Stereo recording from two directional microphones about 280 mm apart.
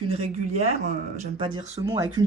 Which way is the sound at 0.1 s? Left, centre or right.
Right.